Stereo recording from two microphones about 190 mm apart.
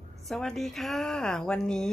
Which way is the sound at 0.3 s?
Centre (ahead or behind).